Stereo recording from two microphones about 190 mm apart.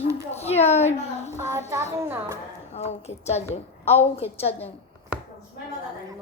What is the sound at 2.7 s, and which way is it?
A woman's voice, 35° left (ahead or behind).